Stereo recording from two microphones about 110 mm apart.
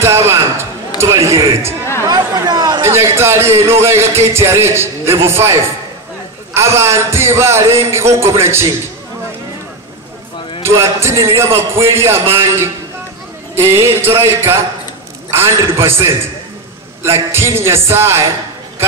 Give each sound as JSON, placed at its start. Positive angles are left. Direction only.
{"t": 0.0, "sound": "a man's voice", "side_deg": -25}
{"t": 2.0, "sound": "speech", "side_deg": -35}
{"t": 2.8, "sound": "a man's voice", "side_deg": -25}
{"t": 10.6, "sound": "a man's voice", "side_deg": -25}